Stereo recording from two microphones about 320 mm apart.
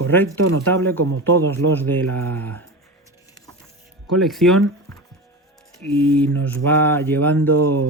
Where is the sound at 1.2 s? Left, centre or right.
Centre.